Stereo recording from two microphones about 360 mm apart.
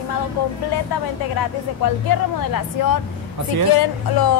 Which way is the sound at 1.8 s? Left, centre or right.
Left.